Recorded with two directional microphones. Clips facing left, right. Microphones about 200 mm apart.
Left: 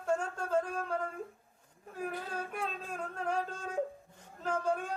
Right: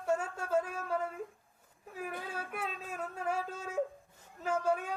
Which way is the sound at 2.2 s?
5° right (ahead or behind).